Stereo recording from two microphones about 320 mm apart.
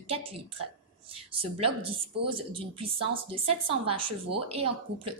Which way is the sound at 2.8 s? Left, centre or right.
Centre.